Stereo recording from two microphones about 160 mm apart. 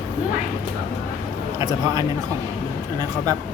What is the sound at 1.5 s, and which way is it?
Speech, 25° right (ahead or behind).